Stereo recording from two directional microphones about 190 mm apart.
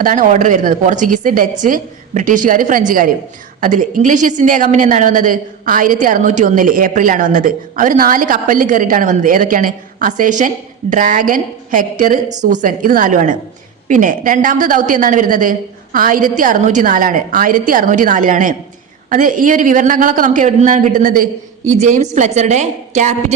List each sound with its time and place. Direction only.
0.0 s a woman's voice: 45° right (ahead or behind)